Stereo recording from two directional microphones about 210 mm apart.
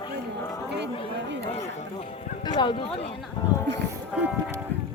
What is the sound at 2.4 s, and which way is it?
Speech, 20° left (ahead or behind).